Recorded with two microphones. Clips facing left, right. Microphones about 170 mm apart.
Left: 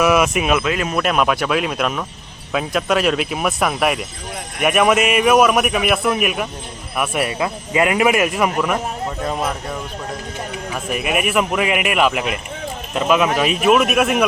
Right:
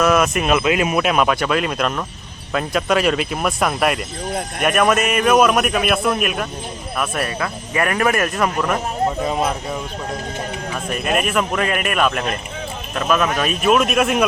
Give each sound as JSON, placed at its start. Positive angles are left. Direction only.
{"t": 0.0, "sound": "speech", "side_deg": 10}
{"t": 0.6, "sound": "speech", "side_deg": -10}
{"t": 1.0, "sound": "a man's voice", "side_deg": 0}
{"t": 9.2, "sound": "speech", "side_deg": -5}
{"t": 10.8, "sound": "a man's voice", "side_deg": 10}